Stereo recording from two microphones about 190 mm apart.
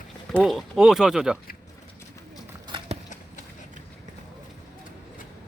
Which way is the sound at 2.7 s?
30° right (ahead or behind).